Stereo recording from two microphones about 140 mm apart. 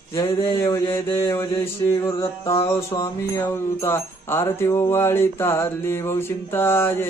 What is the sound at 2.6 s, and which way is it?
Music, 30° left (ahead or behind).